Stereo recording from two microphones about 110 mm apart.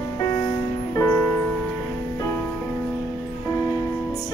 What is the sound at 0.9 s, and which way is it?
Music, 30° left (ahead or behind).